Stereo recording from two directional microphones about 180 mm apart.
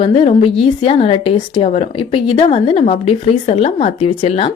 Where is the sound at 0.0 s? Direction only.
30° left (ahead or behind).